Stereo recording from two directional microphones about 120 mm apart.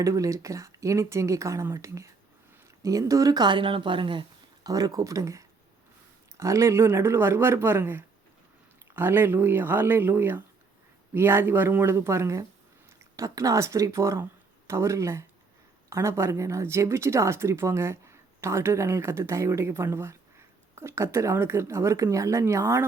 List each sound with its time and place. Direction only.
0.0 s speech: 25° right (ahead or behind)